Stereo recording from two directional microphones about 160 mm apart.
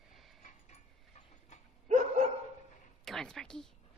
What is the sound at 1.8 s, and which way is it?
Dog, 50° right (ahead or behind).